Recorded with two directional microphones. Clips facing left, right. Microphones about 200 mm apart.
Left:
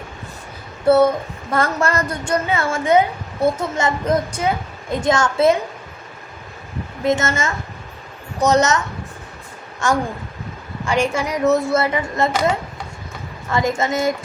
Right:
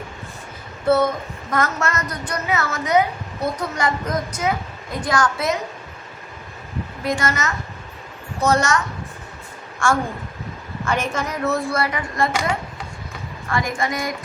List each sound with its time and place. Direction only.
0.9 s a woman's voice: 30° left (ahead or behind)
7.0 s a woman's voice: 25° left (ahead or behind)
9.8 s a woman's voice: 20° left (ahead or behind)
13.5 s a woman's voice: 20° left (ahead or behind)